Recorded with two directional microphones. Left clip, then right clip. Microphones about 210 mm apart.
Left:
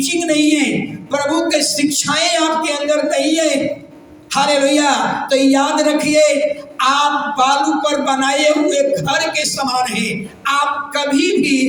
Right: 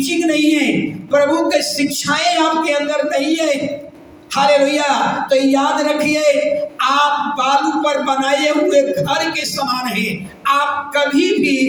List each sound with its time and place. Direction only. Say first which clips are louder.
0.0 s a man's voice: even; 55° left (ahead or behind)